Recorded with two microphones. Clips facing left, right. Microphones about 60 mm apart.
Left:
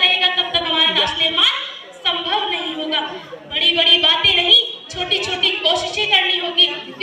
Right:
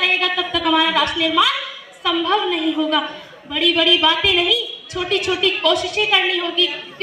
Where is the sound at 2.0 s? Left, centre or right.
Right.